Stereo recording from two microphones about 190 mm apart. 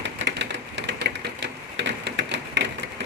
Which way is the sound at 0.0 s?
70° right (ahead or behind).